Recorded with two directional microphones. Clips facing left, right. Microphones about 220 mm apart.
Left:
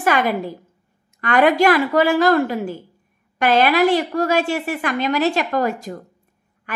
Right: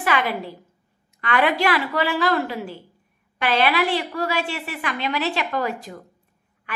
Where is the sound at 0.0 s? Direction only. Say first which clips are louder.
Left 5 dB; 45° left (ahead or behind).